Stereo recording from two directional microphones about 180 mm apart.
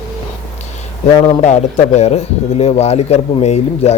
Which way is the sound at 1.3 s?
40° left (ahead or behind).